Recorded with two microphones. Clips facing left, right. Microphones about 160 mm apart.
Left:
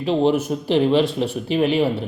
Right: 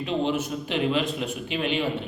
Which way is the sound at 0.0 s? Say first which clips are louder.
Left 7 dB; 35° left (ahead or behind).